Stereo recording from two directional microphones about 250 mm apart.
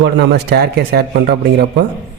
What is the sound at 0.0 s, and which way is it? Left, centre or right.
Speech, right.